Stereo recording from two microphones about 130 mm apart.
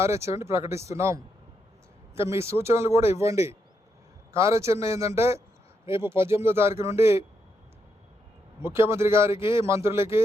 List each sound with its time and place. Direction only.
0.0 s speech: 20° right (ahead or behind)
8.6 s speech: 20° right (ahead or behind)